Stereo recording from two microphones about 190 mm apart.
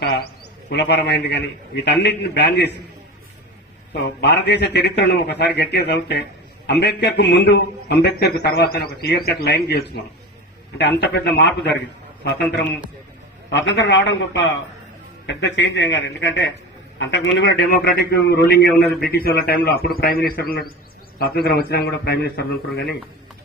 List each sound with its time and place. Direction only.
0.7 s a man's voice: 60° left (ahead or behind)
4.2 s a man's voice: 60° left (ahead or behind)
13.5 s speech: 75° left (ahead or behind)
17.7 s a man's voice: 55° left (ahead or behind)
18.8 s a man's voice: centre (ahead or behind)
19.0 s a man's voice: 55° left (ahead or behind)